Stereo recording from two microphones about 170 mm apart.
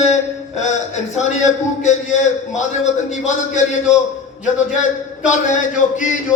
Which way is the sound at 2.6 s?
45° left (ahead or behind).